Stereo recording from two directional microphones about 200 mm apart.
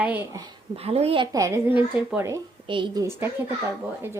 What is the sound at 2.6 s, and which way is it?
Speech, 25° right (ahead or behind).